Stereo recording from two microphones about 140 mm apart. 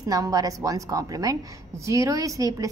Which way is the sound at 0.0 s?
25° right (ahead or behind).